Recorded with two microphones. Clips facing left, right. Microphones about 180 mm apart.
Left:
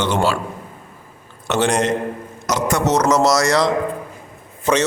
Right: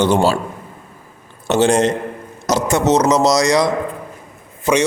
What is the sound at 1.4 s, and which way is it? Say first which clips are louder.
A man's voice: right 4 dB; 30° right (ahead or behind).